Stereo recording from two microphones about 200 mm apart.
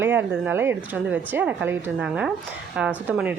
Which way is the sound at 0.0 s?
10° right (ahead or behind).